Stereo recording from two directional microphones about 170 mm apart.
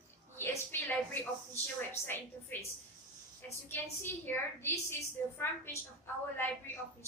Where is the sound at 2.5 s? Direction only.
10° left (ahead or behind).